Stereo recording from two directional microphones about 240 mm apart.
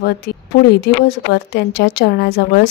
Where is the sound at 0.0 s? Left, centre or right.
Left.